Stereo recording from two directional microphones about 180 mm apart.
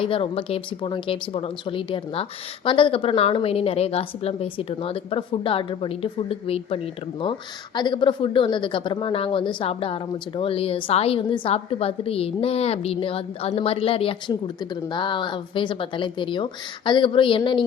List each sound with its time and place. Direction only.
0.0 s a woman's voice: 30° left (ahead or behind)